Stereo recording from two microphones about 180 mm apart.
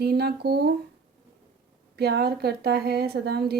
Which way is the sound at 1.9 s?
65° right (ahead or behind).